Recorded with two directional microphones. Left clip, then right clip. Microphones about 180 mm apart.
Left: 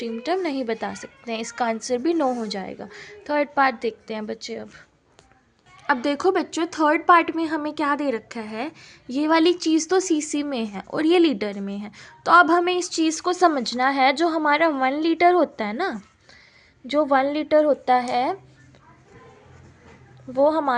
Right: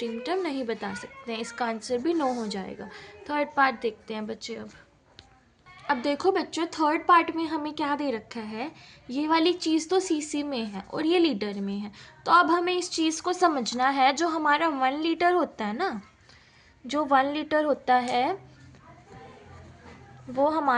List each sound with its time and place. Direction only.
0.0 s a woman's voice: 35° left (ahead or behind)
5.9 s a woman's voice: 45° left (ahead or behind)
20.3 s speech: 25° left (ahead or behind)